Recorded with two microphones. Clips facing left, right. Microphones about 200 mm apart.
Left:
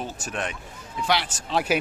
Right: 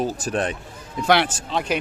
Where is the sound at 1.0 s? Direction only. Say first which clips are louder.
Right 6 dB; 55° right (ahead or behind).